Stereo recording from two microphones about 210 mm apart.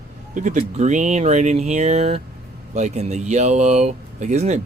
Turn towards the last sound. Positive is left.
turn(degrees=-30)  # may be behind; listen again after turning